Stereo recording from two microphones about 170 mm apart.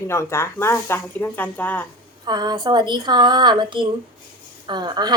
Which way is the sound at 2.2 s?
25° right (ahead or behind).